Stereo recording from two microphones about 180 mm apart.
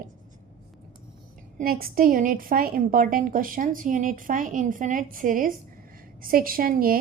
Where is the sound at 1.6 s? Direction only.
55° right (ahead or behind).